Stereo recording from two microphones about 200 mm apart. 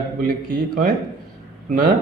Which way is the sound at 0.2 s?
45° right (ahead or behind).